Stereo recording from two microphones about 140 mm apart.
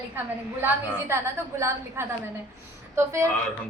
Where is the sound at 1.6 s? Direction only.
20° right (ahead or behind).